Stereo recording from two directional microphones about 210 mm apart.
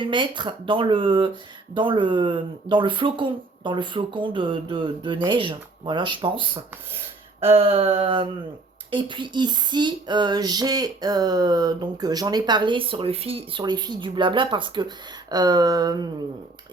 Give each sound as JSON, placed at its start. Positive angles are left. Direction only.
{"t": 0.0, "sound": "female singing", "side_deg": -20}